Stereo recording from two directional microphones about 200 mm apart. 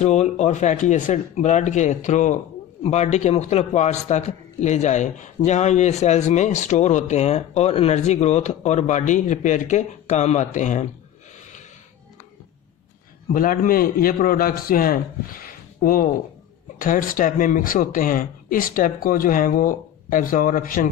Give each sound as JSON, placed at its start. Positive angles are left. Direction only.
{"t": 0.0, "sound": "speech", "side_deg": 35}
{"t": 13.3, "sound": "speech", "side_deg": 45}